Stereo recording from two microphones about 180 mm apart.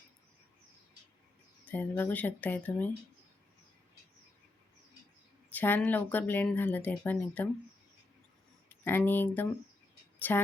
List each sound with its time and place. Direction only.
1.6 s speech: 10° left (ahead or behind)
5.5 s speech: 10° left (ahead or behind)
8.7 s speech: 10° left (ahead or behind)